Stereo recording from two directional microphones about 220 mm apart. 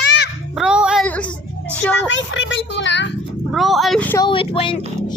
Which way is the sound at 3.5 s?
Centre (ahead or behind).